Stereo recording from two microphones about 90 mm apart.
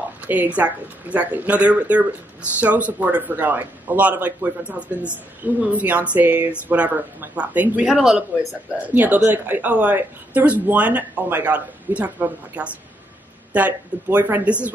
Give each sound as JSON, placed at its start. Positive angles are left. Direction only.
{"t": 0.3, "sound": "a man's voice", "side_deg": -20}
{"t": 7.8, "sound": "speech", "side_deg": -5}
{"t": 8.8, "sound": "a man's voice", "side_deg": -20}